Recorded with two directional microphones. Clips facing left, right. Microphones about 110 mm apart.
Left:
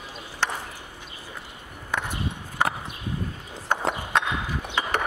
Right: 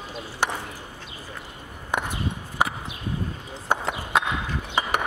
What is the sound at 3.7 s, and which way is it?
Horse, 10° right (ahead or behind).